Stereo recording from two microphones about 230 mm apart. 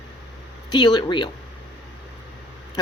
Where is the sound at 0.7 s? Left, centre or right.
Centre.